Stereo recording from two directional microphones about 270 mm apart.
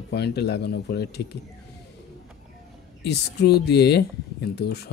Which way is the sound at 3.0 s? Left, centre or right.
Left.